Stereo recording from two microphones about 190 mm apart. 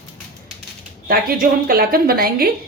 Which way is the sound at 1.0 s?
50° right (ahead or behind).